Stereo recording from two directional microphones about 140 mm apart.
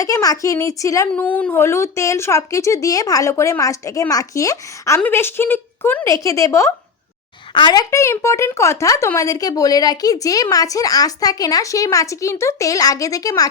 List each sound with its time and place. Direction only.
0.0 s a woman's voice: 25° left (ahead or behind)
1.1 s a woman's voice: 10° left (ahead or behind)
7.5 s a woman's voice: 30° left (ahead or behind)